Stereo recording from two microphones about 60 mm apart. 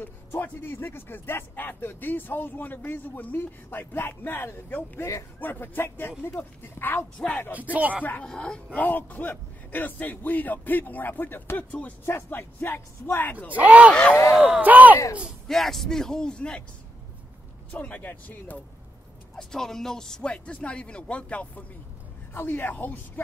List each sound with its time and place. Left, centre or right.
0.0 s speech: left
7.2 s speech: centre
7.7 s speech: right
8.2 s speech: centre
8.7 s speech: left
13.6 s speech: right
15.4 s speech: centre
17.6 s speech: left
19.3 s speech: centre; by 21.6 s left
22.3 s speech: left